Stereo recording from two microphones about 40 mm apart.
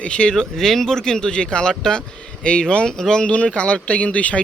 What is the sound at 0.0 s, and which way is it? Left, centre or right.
Speech, left.